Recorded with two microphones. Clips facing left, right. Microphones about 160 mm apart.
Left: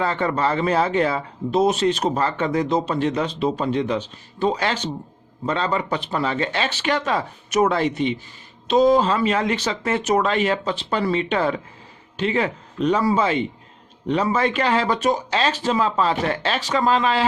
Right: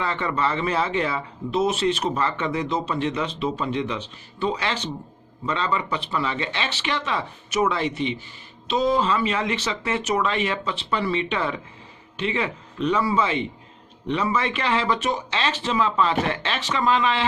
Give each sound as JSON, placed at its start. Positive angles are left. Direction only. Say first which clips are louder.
{"t": 0.0, "sound": "speech", "louder": "left 4 dB", "side_deg": 40}